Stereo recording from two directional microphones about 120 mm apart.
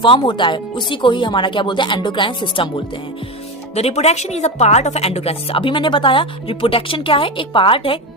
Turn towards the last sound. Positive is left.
turn(degrees=45)  # may be behind; listen again after turning